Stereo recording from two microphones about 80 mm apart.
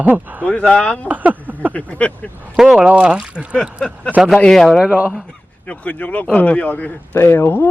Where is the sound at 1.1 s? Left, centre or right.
Centre.